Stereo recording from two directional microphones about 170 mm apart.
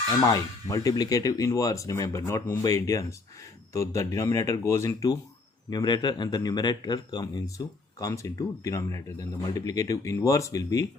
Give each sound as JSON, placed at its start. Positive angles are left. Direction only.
{"t": 0.1, "sound": "speech", "side_deg": 20}